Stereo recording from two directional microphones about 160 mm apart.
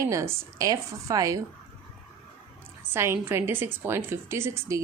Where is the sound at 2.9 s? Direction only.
15° right (ahead or behind).